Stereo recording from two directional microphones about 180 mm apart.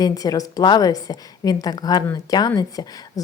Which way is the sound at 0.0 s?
20° left (ahead or behind).